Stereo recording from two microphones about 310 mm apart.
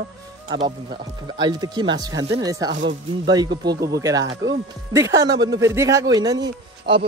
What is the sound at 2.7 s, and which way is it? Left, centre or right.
Speech, right.